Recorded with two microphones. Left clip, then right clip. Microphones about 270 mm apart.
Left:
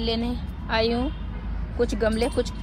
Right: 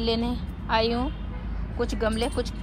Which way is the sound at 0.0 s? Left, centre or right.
Centre.